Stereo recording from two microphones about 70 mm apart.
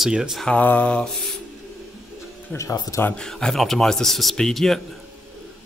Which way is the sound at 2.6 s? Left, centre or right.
Left.